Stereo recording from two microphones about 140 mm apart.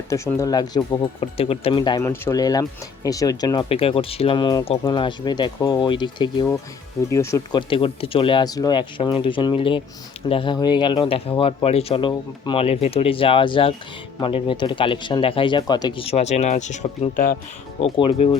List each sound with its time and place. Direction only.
0.1 s speech: 20° left (ahead or behind)
1.2 s speech: 45° left (ahead or behind)
2.0 s speech: 20° left (ahead or behind); by 6.5 s 35° left (ahead or behind)
7.1 s speech: 20° left (ahead or behind)
7.5 s speech: 40° left (ahead or behind); by 17.3 s 70° left (ahead or behind)
17.7 s speech: 40° left (ahead or behind)